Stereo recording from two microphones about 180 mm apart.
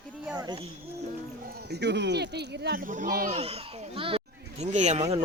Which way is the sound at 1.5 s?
60° right (ahead or behind).